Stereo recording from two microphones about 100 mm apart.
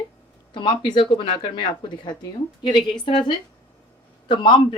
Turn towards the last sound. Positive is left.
turn(degrees=60)  # may be behind; listen again after turning